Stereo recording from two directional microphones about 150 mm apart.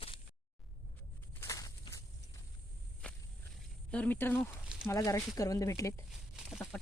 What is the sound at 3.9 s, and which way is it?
Speech, 10° left (ahead or behind).